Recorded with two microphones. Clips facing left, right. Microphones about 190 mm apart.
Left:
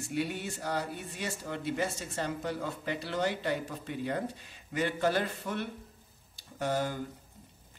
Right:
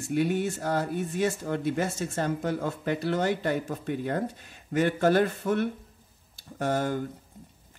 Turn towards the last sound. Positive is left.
turn(degrees=-50)  # may be behind; listen again after turning